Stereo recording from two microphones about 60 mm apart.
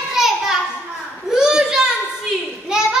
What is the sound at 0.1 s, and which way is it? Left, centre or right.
Children playing, centre.